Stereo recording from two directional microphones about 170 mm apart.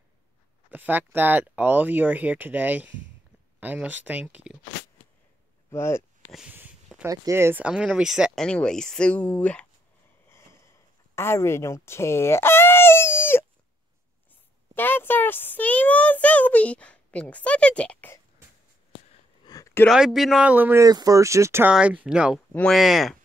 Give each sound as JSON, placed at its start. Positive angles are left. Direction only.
{"t": 0.7, "sound": "speech", "side_deg": -10}
{"t": 5.7, "sound": "speech", "side_deg": 15}
{"t": 6.3, "sound": "speech", "side_deg": -10}
{"t": 11.1, "sound": "a sound", "side_deg": 15}
{"t": 14.8, "sound": "a child's voice", "side_deg": 10}
{"t": 19.4, "sound": "a sound", "side_deg": 20}
{"t": 19.9, "sound": "speech", "side_deg": 0}